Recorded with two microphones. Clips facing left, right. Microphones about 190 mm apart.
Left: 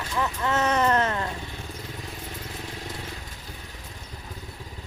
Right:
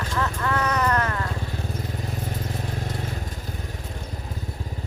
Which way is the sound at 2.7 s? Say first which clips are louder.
Right 6 dB; 45° right (ahead or behind).